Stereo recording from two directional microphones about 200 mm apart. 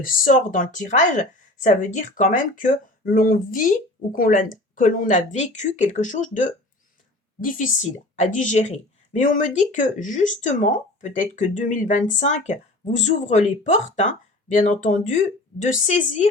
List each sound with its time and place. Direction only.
0.0 s a woman's voice: 40° left (ahead or behind)